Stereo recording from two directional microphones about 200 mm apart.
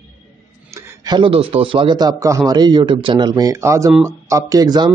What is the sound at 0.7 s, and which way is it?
A man's voice, 15° right (ahead or behind).